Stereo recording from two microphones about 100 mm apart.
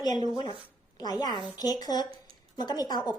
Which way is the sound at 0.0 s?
45° left (ahead or behind).